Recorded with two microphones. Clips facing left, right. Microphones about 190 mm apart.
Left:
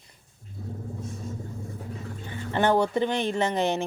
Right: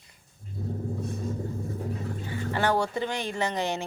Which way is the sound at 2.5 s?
20° left (ahead or behind).